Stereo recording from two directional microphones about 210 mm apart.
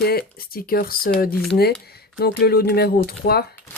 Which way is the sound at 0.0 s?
45° left (ahead or behind).